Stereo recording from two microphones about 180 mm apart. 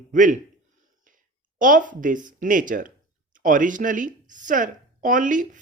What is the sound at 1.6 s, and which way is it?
Speech, 50° right (ahead or behind).